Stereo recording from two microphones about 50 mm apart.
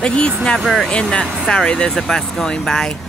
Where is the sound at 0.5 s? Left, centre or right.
Centre.